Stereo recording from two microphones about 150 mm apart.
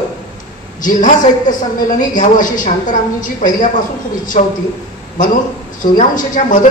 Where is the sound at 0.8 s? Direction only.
60° left (ahead or behind).